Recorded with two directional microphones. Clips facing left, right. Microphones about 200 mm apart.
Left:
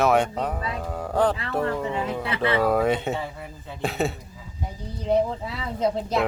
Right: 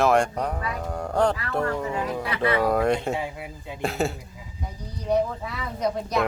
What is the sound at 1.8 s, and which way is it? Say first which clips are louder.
Speech: left 1 dB; 25° left (ahead or behind).